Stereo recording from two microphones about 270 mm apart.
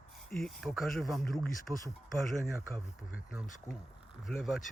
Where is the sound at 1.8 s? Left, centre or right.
Centre.